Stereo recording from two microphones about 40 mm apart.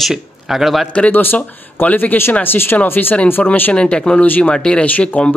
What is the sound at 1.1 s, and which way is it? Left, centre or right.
Speech, left.